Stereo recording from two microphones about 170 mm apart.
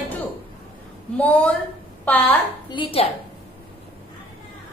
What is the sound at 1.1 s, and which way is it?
A woman's voice, 10° left (ahead or behind).